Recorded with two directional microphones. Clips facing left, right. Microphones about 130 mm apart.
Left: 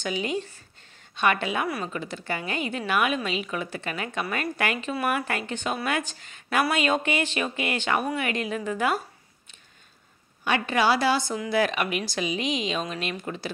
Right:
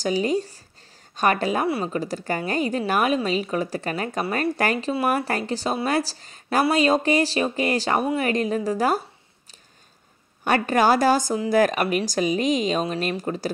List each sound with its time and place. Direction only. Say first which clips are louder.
0.0 s a woman's voice: right 6 dB; 40° right (ahead or behind)
10.4 s a woman's voice: right 4 dB; 45° right (ahead or behind)